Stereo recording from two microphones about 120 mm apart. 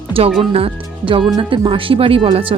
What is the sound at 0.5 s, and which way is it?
A woman's voice, 50° right (ahead or behind).